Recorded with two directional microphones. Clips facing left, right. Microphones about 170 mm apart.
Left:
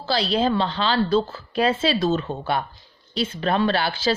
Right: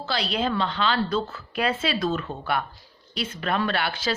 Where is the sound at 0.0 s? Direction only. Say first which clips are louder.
Left 5 dB; 30° left (ahead or behind).